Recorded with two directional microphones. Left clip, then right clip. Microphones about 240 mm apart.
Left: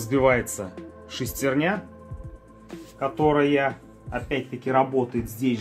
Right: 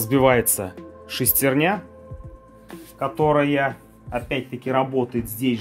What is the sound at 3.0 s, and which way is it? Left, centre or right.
Speech, right.